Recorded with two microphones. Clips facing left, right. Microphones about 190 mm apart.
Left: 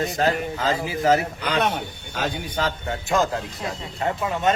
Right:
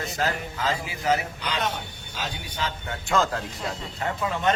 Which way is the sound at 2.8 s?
30° left (ahead or behind).